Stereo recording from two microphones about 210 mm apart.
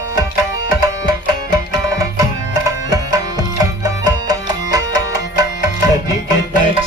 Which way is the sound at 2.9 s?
15° right (ahead or behind).